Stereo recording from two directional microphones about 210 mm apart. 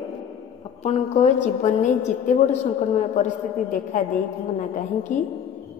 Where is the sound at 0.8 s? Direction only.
35° left (ahead or behind).